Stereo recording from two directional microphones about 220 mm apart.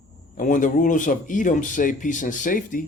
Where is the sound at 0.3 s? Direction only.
35° left (ahead or behind).